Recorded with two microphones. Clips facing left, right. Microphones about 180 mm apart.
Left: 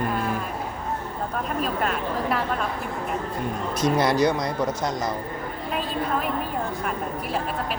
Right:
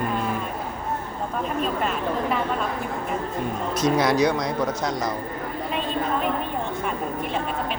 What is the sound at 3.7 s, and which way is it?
Speech, 55° left (ahead or behind).